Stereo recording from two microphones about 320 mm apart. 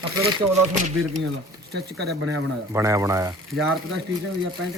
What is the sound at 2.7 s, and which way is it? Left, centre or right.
Speech, centre.